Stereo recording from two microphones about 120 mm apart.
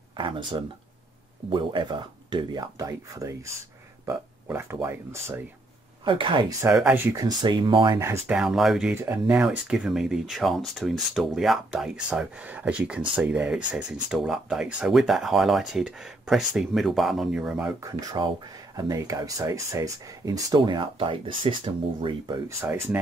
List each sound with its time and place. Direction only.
0.1 s speech: 40° right (ahead or behind); by 5.4 s 20° right (ahead or behind)
6.0 s speech: 45° right (ahead or behind)
6.9 s speech: 15° right (ahead or behind)
7.2 s speech: 35° right (ahead or behind)
8.3 s speech: 5° right (ahead or behind)
8.9 s speech: 20° right (ahead or behind)
9.4 s speech: 5° right (ahead or behind)
18.1 s speech: 35° right (ahead or behind)